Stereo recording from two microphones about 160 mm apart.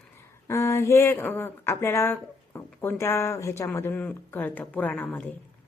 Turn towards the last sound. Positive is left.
turn(degrees=10)  # may be behind; listen again after turning